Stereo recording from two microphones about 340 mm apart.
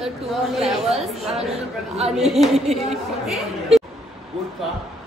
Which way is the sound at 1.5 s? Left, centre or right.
Centre.